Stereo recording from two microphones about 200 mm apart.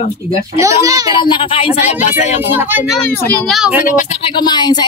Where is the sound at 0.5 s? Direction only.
15° right (ahead or behind).